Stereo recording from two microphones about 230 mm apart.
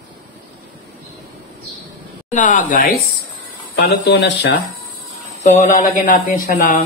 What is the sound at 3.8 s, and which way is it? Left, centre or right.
Speech, left.